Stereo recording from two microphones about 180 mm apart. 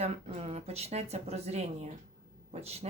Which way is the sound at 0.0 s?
35° right (ahead or behind).